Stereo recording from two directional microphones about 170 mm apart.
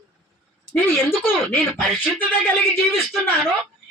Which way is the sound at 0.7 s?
10° left (ahead or behind).